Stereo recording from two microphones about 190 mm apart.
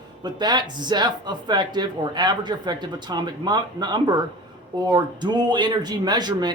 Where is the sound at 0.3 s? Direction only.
20° right (ahead or behind).